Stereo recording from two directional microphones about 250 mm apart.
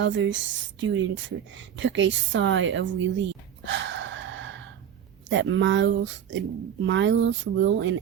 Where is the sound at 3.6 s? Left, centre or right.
Right.